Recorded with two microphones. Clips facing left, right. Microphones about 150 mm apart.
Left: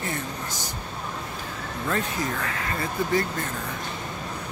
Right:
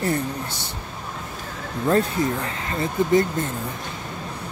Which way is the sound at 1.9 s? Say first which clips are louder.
Right 8 dB; 30° right (ahead or behind).